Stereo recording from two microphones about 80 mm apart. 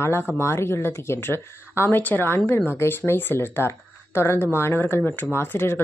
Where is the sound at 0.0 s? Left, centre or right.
Left.